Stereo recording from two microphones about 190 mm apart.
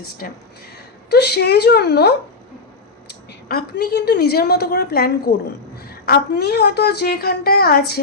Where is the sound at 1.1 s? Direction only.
60° left (ahead or behind).